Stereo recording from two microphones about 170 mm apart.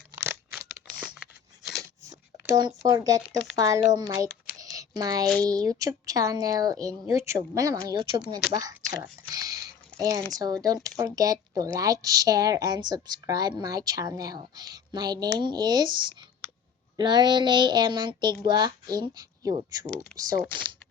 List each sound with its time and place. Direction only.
0.1 s a sound: 15° right (ahead or behind)
1.0 s a sound: centre (ahead or behind)
2.6 s a woman's voice: 25° right (ahead or behind)
4.5 s a sound: 20° right (ahead or behind)
5.5 s a woman's voice: 20° right (ahead or behind)
8.9 s whispering: 20° right (ahead or behind)
10.0 s a woman's voice: 20° right (ahead or behind)
17.0 s a woman's voice: 25° right (ahead or behind)
20.1 s speech: 5° left (ahead or behind)